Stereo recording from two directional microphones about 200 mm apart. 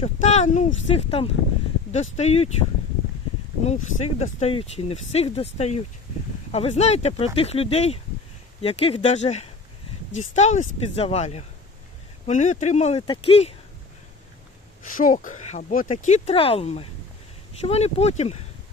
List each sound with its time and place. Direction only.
0.0 s speech: 35° left (ahead or behind)
3.6 s speech: 35° left (ahead or behind)
14.9 s speech: 40° left (ahead or behind)